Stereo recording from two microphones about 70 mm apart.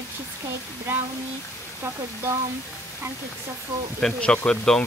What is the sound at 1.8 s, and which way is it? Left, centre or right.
Speech, right.